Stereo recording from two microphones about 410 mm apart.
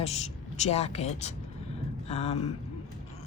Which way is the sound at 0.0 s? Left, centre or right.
Centre.